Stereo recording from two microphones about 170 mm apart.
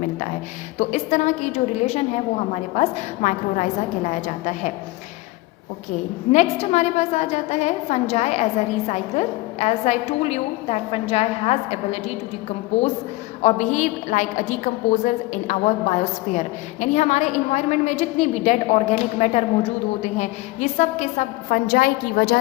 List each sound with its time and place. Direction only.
0.8 s a woman's voice: 45° left (ahead or behind)
6.3 s a woman's voice: 40° left (ahead or behind)
13.4 s a woman's voice: 45° left (ahead or behind); by 22.4 s 65° left (ahead or behind)